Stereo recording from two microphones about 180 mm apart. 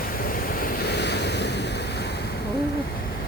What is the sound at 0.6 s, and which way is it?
Waves, 65° left (ahead or behind).